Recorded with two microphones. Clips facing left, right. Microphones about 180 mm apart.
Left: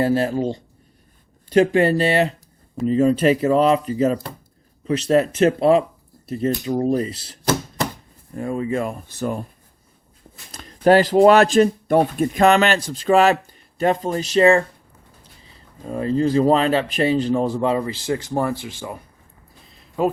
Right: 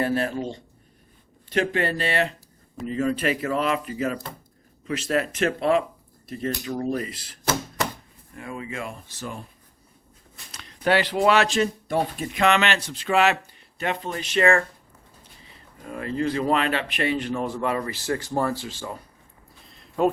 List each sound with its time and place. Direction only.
0.0 s speech: 30° left (ahead or behind)
8.3 s speech: 40° left (ahead or behind)
10.5 s speech: 45° left (ahead or behind); by 18.9 s 15° left (ahead or behind)
19.6 s a sound: centre (ahead or behind)